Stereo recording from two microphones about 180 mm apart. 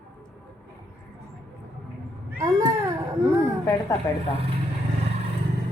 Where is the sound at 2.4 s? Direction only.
20° right (ahead or behind).